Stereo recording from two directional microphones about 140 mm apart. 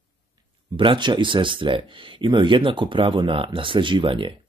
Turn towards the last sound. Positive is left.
turn(degrees=-35)  # may be behind; listen again after turning